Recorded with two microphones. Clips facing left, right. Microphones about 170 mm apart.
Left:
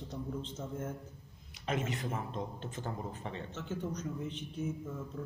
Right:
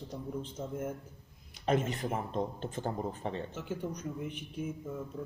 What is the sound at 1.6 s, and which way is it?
Speech, 45° right (ahead or behind).